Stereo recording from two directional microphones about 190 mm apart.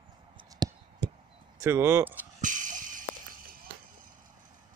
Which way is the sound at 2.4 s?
45° right (ahead or behind).